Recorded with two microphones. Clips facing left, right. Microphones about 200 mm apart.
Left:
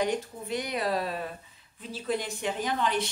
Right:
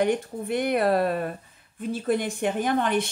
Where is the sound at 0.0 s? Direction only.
55° right (ahead or behind).